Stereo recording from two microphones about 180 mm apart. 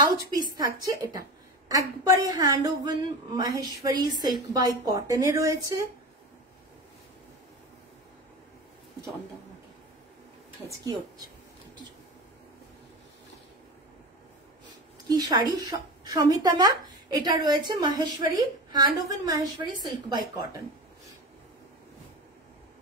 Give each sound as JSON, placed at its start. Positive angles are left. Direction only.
{"t": 0.6, "sound": "speech", "side_deg": -20}
{"t": 15.0, "sound": "speech", "side_deg": -20}